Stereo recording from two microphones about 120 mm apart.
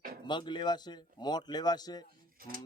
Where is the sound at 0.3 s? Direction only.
40° left (ahead or behind).